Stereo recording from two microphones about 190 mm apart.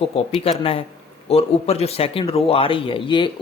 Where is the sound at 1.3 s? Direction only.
30° left (ahead or behind).